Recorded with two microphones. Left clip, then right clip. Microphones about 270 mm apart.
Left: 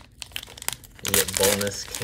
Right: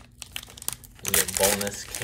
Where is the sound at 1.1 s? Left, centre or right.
Left.